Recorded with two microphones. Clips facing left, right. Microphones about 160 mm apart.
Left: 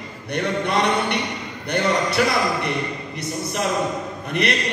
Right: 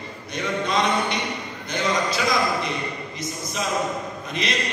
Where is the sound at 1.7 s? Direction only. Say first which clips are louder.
Left 3 dB; 65° left (ahead or behind).